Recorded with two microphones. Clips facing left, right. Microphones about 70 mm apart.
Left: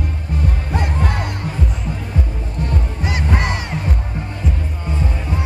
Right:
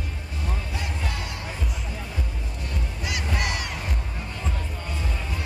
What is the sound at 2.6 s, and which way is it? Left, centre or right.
Music, left.